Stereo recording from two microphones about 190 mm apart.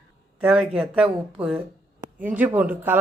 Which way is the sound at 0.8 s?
5° right (ahead or behind).